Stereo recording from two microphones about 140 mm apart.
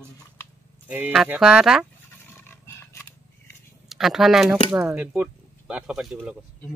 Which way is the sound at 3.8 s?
Centre (ahead or behind).